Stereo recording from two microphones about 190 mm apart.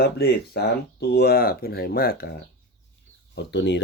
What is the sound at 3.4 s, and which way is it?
Speech, 65° left (ahead or behind).